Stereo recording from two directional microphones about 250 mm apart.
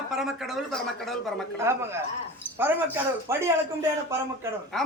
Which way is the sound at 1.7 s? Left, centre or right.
Centre.